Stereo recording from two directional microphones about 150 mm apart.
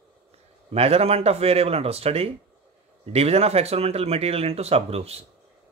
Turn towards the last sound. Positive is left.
turn(degrees=-45)  # may be behind; listen again after turning